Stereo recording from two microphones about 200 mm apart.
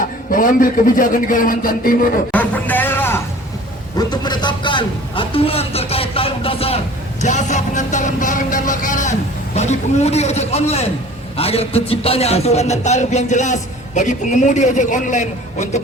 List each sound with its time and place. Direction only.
0.3 s a man's voice: 45° left (ahead or behind)
2.3 s a sound: 10° left (ahead or behind)
3.9 s a man's voice: 20° left (ahead or behind); by 15.8 s 35° left (ahead or behind)